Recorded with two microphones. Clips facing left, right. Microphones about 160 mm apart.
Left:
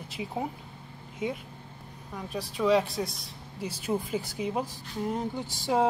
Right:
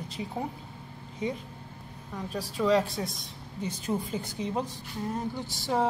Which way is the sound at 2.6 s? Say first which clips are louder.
Left 1 dB; 5° left (ahead or behind).